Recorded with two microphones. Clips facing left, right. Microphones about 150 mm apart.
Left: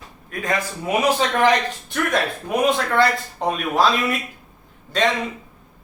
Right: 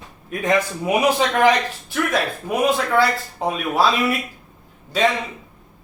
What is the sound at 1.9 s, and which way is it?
Speech, 5° right (ahead or behind).